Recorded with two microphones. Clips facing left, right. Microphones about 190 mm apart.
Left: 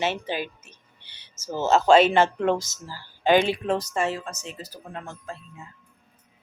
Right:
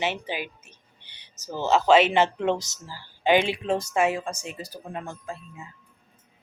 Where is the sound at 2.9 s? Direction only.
15° right (ahead or behind).